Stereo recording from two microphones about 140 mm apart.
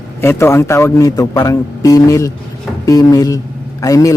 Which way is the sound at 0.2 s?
15° left (ahead or behind).